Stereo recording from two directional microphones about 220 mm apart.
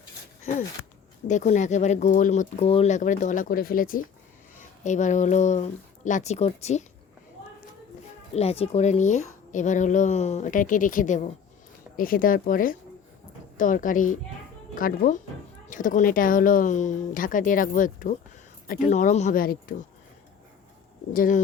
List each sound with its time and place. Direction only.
1.3 s speech: 35° left (ahead or behind)
8.3 s speech: 30° left (ahead or behind)
21.1 s speech: 40° left (ahead or behind)